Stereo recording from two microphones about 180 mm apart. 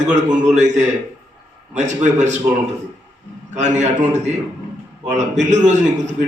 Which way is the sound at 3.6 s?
40° right (ahead or behind).